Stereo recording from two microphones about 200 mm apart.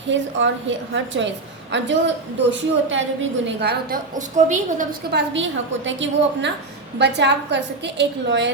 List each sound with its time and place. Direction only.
0.1 s a woman's voice: 65° right (ahead or behind); by 4.9 s 35° right (ahead or behind)
5.1 s a woman's voice: 65° right (ahead or behind)
7.0 s a woman's voice: 60° right (ahead or behind)